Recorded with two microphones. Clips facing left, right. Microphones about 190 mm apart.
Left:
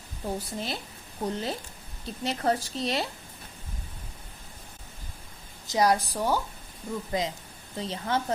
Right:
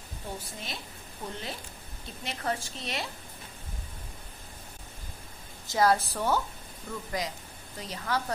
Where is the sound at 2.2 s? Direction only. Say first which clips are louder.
Left 6 dB; 35° left (ahead or behind).